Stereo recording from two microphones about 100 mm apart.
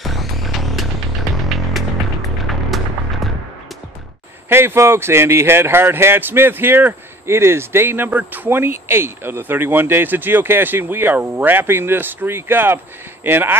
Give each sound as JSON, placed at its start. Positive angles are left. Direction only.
{"t": 0.0, "sound": "music", "side_deg": 0}
{"t": 4.5, "sound": "speech", "side_deg": -25}